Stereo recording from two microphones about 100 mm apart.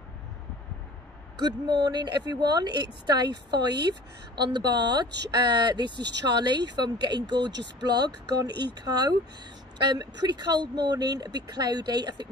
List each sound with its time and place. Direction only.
1.4 s speech: 45° right (ahead or behind)